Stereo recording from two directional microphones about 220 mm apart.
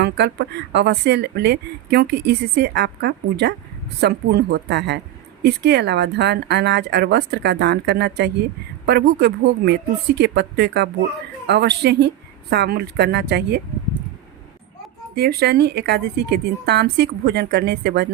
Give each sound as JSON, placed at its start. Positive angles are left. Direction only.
{"t": 0.0, "sound": "speech", "side_deg": -50}
{"t": 15.1, "sound": "speech", "side_deg": -45}